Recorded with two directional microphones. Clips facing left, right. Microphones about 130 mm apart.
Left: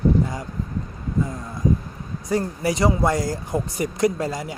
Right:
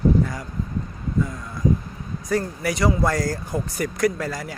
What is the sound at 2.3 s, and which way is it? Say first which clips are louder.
Speech: left 1 dB; 25° left (ahead or behind).